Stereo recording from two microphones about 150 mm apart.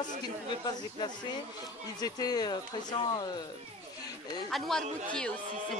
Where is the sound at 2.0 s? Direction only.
25° left (ahead or behind).